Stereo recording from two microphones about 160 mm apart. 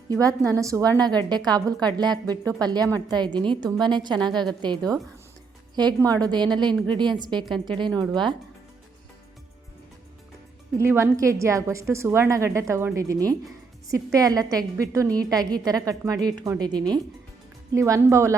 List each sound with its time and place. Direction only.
0.1 s a woman's voice: 20° right (ahead or behind)
10.8 s a woman's voice: 15° right (ahead or behind)